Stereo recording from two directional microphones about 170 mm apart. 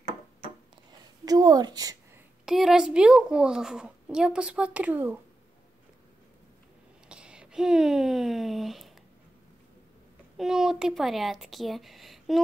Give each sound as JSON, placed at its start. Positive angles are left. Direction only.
{"t": 1.2, "sound": "a woman's voice", "side_deg": -25}
{"t": 2.4, "sound": "a woman's voice", "side_deg": 0}
{"t": 7.1, "sound": "a sound", "side_deg": -5}
{"t": 10.3, "sound": "speech", "side_deg": 0}